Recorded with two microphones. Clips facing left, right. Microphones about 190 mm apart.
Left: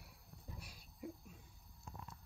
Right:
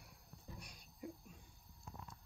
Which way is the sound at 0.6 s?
5° left (ahead or behind).